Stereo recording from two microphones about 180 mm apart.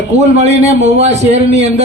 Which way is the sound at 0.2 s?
35° right (ahead or behind).